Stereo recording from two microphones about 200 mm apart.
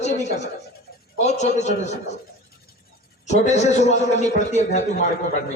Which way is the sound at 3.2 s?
35° left (ahead or behind).